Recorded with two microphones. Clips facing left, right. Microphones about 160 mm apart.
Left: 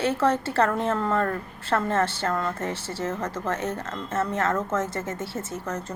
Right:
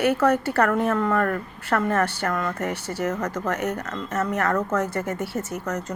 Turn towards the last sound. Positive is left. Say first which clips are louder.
# right 3 dB
turn(degrees=25)  # may be behind; listen again after turning